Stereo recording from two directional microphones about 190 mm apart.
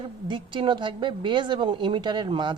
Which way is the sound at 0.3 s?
25° right (ahead or behind).